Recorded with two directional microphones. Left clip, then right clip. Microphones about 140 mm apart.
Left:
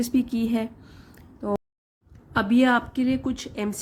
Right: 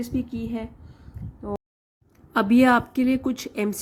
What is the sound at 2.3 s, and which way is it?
A woman's voice, 25° right (ahead or behind).